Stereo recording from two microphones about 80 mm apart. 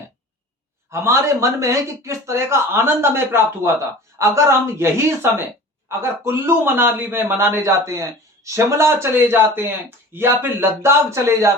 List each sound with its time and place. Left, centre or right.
0.9 s a man's voice: right